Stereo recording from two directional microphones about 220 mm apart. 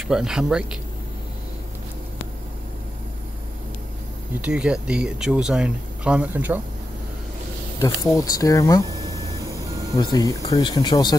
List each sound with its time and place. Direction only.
0.1 s speech: centre (ahead or behind)
4.4 s speech: 5° right (ahead or behind)
7.8 s speech: 15° left (ahead or behind)
8.8 s a sound: 15° right (ahead or behind)
9.9 s speech: 20° left (ahead or behind)